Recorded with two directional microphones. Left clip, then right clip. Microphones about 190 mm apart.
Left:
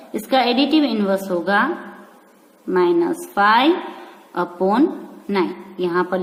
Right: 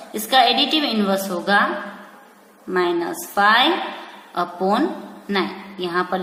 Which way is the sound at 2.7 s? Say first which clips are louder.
Left 4 dB; 35° left (ahead or behind).